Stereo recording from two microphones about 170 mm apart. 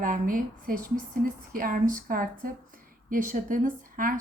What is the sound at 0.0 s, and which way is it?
A woman's voice, 55° right (ahead or behind).